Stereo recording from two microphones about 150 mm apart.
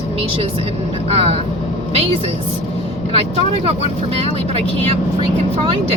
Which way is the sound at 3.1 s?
40° right (ahead or behind).